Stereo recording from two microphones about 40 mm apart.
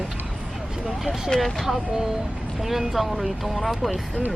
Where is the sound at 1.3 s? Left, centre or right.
Centre.